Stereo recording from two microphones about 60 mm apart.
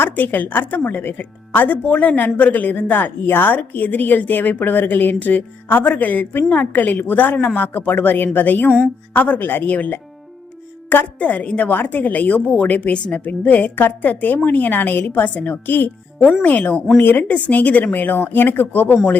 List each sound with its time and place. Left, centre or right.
0.0 s a woman's voice: left
11.2 s a woman's voice: left
17.2 s a woman's voice: left